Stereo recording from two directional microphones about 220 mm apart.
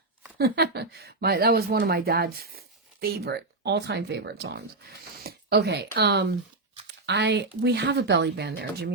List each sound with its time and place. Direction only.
0.3 s speech: 45° right (ahead or behind)